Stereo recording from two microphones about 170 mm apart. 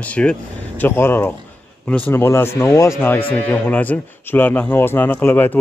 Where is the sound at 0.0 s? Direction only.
5° left (ahead or behind).